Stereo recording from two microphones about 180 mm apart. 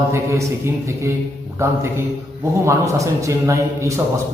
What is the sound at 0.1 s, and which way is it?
A man's voice, 15° right (ahead or behind).